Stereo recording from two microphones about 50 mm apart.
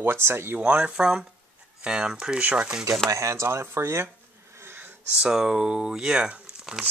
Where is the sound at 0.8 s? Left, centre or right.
Centre.